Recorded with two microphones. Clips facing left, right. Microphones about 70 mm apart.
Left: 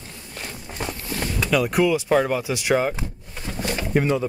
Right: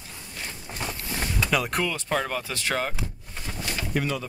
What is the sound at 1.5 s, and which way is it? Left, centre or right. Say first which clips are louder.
Speech: left 9 dB; centre.